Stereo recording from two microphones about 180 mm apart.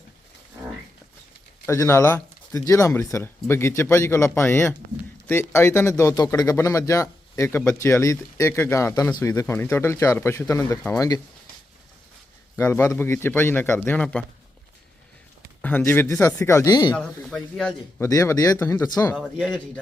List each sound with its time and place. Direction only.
1.6 s speech: 15° left (ahead or behind)
12.5 s speech: 15° left (ahead or behind)
15.6 s speech: 10° left (ahead or behind)
17.0 s speech: centre (ahead or behind)
18.0 s speech: 15° left (ahead or behind)
19.1 s speech: 5° right (ahead or behind)